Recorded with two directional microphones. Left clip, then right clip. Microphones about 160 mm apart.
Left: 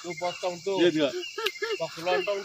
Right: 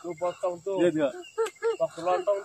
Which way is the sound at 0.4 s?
65° right (ahead or behind).